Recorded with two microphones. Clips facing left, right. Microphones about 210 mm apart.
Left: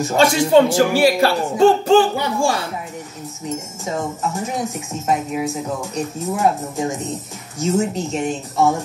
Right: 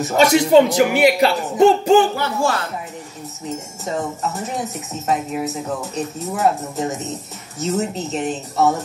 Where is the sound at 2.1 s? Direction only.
15° left (ahead or behind).